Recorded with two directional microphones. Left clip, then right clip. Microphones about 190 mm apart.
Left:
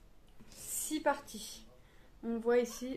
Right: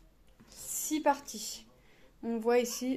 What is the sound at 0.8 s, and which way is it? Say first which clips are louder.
Speech: right 4 dB; 35° right (ahead or behind).